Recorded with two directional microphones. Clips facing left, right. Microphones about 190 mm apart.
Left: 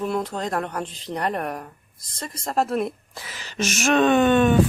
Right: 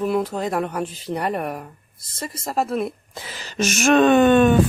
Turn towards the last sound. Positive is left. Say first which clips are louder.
# right 3 dB
turn(degrees=-50)  # may be behind; listen again after turning